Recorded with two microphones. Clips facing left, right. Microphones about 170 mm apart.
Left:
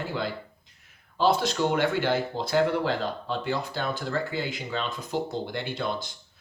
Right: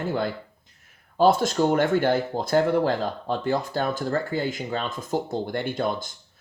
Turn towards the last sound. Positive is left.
turn(degrees=-45)  # may be behind; listen again after turning